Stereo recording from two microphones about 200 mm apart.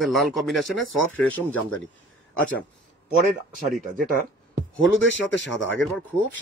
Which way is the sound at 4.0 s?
40° right (ahead or behind).